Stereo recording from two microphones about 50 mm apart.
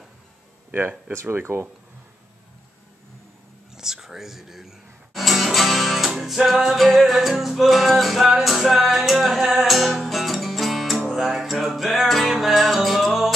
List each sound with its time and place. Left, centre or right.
1.2 s speech: right
3.7 s speech: centre
8.3 s music: centre